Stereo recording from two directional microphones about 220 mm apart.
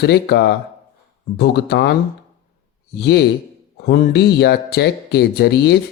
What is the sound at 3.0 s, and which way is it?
Speech, 50° left (ahead or behind).